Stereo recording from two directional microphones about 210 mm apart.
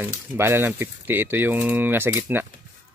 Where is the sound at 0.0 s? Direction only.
10° right (ahead or behind).